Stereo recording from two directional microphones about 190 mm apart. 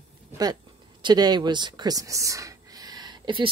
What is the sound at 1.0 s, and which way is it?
Speech, 20° right (ahead or behind).